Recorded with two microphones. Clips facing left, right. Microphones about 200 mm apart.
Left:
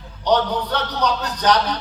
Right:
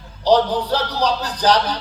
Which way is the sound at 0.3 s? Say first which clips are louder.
Right 3 dB; 30° right (ahead or behind).